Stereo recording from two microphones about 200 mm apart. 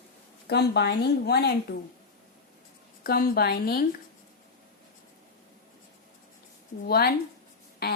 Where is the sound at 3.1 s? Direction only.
50° left (ahead or behind).